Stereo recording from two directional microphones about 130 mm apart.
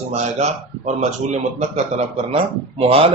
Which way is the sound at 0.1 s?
60° right (ahead or behind).